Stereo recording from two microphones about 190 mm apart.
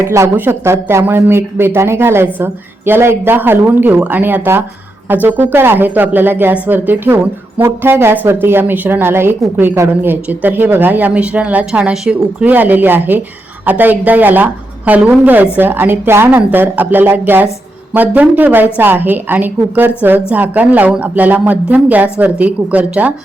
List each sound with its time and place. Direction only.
0.0 s a woman's voice: 15° right (ahead or behind)